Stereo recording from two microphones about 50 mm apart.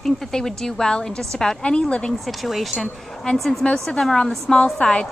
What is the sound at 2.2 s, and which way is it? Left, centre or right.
Speech, centre.